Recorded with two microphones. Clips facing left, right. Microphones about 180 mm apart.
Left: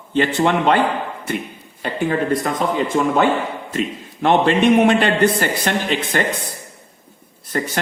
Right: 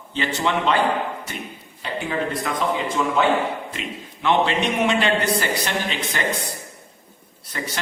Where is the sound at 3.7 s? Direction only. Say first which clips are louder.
Left 9 dB; 50° left (ahead or behind).